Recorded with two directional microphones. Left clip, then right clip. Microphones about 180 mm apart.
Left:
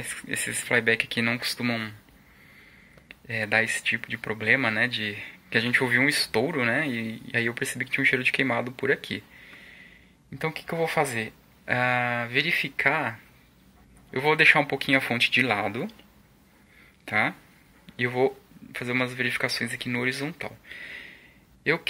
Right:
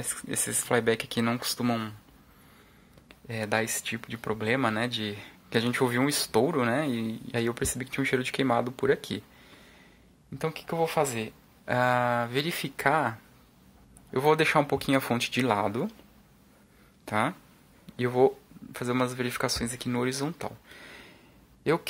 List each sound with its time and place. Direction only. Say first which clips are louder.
0.4 s speech: left 2 dB; centre (ahead or behind)
0.7 s a man's voice: left 3 dB; 20° right (ahead or behind)
3.3 s a man's voice: left 5 dB; 15° right (ahead or behind)
10.7 s speech: left 1 dB; 5° right (ahead or behind)
11.8 s a man's voice: right 1 dB; 20° right (ahead or behind)
14.1 s a man's voice: left 4 dB; 20° right (ahead or behind)
17.0 s a man's voice: left 3 dB; 20° right (ahead or behind)